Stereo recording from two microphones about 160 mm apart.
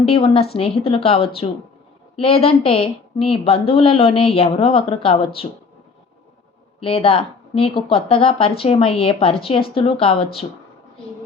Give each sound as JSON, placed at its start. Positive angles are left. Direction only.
{"t": 0.0, "sound": "speech", "side_deg": 35}
{"t": 6.7, "sound": "speech", "side_deg": 35}